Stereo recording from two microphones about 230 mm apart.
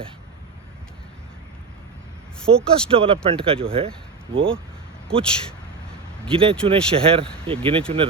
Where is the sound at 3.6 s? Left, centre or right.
Right.